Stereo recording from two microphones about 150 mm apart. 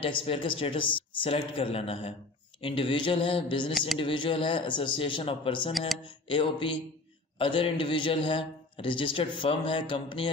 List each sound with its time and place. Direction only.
0.0 s a man's voice: 35° left (ahead or behind)
5.7 s speech: centre (ahead or behind)
6.2 s a man's voice: 35° left (ahead or behind)